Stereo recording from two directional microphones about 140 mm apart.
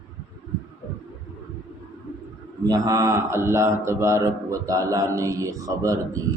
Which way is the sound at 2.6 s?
25° right (ahead or behind).